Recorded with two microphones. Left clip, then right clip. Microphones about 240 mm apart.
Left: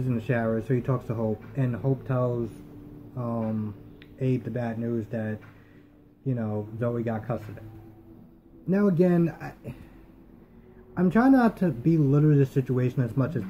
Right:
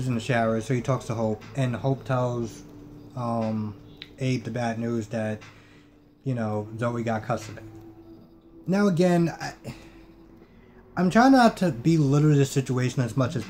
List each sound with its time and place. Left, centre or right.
0.0 s speech: centre
8.6 s speech: centre
11.0 s speech: centre